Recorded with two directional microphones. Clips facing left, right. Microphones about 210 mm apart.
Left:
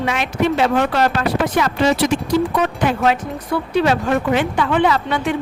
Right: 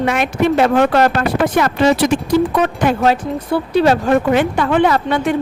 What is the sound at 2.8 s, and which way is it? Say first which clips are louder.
A woman's voice: right 3 dB; 40° right (ahead or behind).